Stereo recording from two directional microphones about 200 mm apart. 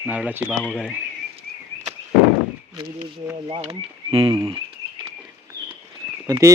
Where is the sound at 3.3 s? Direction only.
25° right (ahead or behind).